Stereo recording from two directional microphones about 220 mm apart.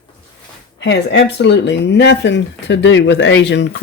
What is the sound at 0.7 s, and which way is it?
Speech, 50° left (ahead or behind).